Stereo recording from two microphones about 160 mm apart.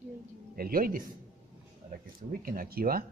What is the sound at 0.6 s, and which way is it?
Speech, 65° right (ahead or behind).